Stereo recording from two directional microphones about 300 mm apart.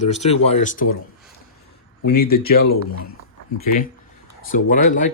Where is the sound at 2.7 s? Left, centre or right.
Left.